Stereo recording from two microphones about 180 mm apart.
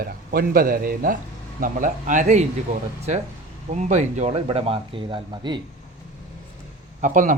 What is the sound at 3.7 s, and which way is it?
Speech, 40° right (ahead or behind).